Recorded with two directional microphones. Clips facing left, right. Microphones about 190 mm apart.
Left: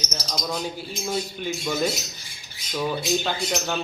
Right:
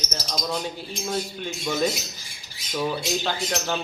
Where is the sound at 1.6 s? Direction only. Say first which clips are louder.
Right 2 dB; centre (ahead or behind).